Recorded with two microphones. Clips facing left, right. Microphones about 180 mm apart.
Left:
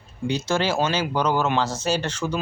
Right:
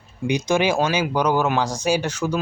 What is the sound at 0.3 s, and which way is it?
Speech, 15° right (ahead or behind).